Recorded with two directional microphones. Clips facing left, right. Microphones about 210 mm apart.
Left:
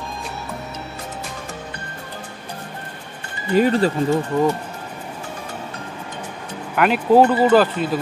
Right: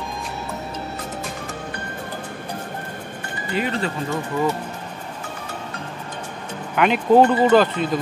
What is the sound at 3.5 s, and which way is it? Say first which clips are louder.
Speech: left 8 dB; 40° left (ahead or behind).